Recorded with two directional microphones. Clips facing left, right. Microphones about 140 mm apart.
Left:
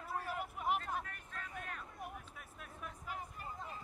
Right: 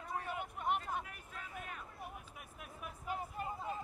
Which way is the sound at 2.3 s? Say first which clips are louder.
Right 1 dB; 15° right (ahead or behind).